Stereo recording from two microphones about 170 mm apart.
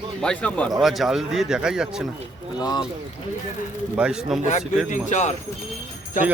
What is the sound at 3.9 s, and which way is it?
Speech, 5° right (ahead or behind).